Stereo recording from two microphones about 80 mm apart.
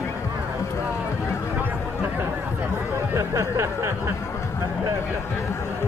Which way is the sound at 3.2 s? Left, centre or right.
Right.